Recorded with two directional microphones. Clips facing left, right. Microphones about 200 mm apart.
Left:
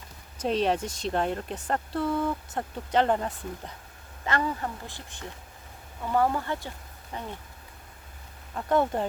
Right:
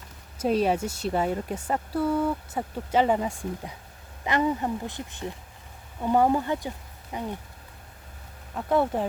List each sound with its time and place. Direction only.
0.3 s speech: 5° right (ahead or behind)
8.5 s speech: 5° right (ahead or behind)